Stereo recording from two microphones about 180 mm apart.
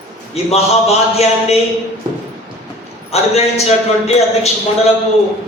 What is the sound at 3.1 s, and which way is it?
Speech, 35° left (ahead or behind).